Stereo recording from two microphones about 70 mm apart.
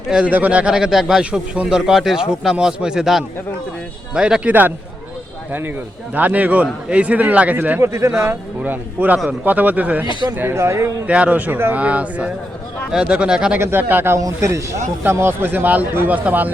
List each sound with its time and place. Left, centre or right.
0.3 s speech: right
5.5 s a man's voice: right
7.8 s speech: right
8.3 s a man's voice: right
10.3 s speech: right
11.0 s a man's voice: centre
13.6 s speech: right
14.2 s speech: right